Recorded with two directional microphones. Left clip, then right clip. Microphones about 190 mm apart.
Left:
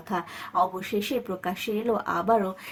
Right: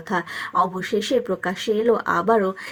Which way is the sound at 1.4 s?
15° right (ahead or behind).